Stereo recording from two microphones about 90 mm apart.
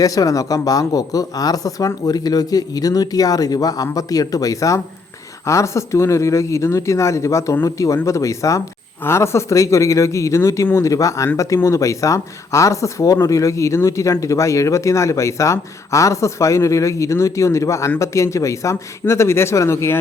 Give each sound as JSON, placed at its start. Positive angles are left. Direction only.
{"t": 0.0, "sound": "speech", "side_deg": 40}